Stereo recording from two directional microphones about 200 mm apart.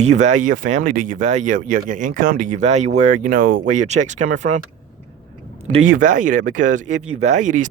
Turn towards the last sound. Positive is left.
turn(degrees=-40)  # may be behind; listen again after turning